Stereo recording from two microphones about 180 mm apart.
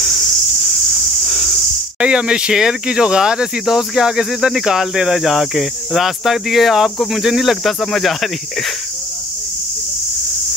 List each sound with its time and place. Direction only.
2.0 s speech: 5° right (ahead or behind)